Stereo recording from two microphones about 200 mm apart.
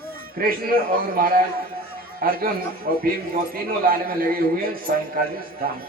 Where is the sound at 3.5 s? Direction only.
45° right (ahead or behind).